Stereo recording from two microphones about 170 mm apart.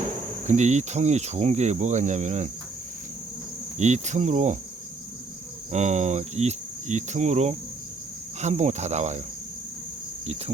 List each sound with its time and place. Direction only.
0.4 s cricket: 45° right (ahead or behind)
3.8 s cricket: 45° right (ahead or behind)
5.7 s cricket: 45° right (ahead or behind)